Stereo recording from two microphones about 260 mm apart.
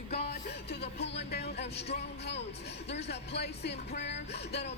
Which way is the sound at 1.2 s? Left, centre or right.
Left.